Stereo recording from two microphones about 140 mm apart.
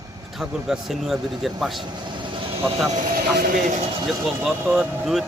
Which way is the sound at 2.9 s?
80° right.